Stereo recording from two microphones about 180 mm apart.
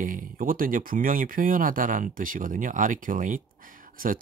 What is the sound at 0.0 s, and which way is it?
Speech, 50° right (ahead or behind).